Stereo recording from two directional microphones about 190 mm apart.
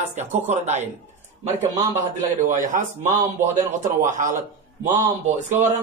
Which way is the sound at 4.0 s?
40° right (ahead or behind).